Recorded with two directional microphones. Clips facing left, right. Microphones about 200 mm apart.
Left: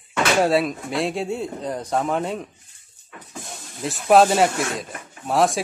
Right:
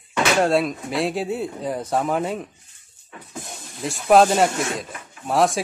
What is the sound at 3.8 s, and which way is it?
Speech, centre (ahead or behind).